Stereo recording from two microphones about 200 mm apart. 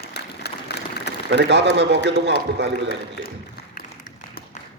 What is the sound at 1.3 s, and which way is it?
A man's voice, 60° right (ahead or behind).